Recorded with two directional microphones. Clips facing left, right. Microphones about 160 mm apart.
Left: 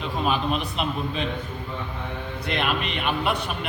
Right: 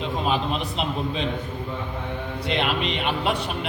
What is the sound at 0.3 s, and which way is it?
Speech, 30° right (ahead or behind).